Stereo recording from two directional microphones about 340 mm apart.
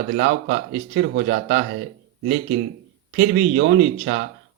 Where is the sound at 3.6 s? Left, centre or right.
Right.